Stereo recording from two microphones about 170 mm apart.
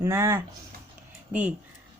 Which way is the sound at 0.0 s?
15° right (ahead or behind).